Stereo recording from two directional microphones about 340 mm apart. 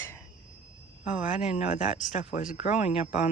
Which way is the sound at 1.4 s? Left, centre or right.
Left.